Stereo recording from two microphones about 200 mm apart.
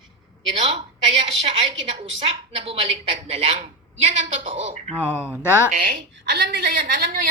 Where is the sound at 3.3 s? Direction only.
30° right (ahead or behind).